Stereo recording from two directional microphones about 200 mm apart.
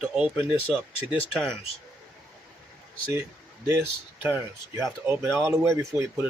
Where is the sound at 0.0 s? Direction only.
5° right (ahead or behind).